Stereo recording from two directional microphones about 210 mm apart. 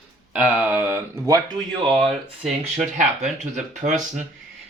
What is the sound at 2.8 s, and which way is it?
Speech, 35° right (ahead or behind).